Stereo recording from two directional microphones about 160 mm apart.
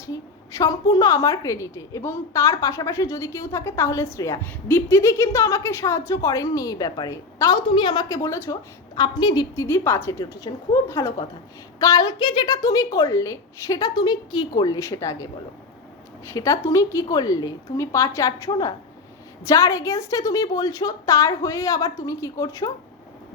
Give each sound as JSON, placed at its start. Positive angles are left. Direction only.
{"t": 0.0, "sound": "a woman's voice", "side_deg": 20}